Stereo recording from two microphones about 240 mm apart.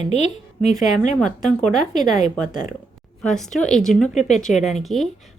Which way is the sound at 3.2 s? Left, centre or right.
Centre.